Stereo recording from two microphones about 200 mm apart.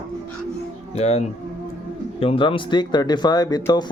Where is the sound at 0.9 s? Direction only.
35° left (ahead or behind).